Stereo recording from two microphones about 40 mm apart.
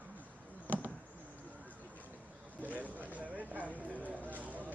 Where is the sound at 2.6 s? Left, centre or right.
Right.